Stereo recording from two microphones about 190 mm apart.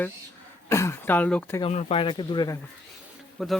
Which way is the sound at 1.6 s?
35° left (ahead or behind).